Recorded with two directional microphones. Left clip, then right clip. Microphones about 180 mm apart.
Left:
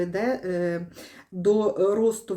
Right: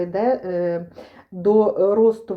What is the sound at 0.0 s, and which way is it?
Speech, 25° left (ahead or behind).